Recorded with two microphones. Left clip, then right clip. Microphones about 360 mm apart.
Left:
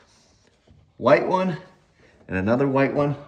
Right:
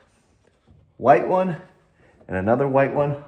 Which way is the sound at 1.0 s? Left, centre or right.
Centre.